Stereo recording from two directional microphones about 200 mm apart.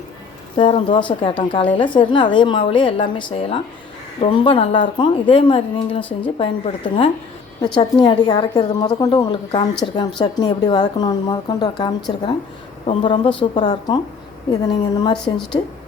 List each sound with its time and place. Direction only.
0.5 s a woman's voice: 25° left (ahead or behind)
6.0 s speech: 10° left (ahead or behind)
6.4 s a woman's voice: 25° left (ahead or behind)